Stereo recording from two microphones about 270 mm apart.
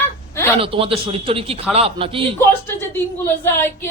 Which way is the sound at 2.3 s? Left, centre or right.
Centre.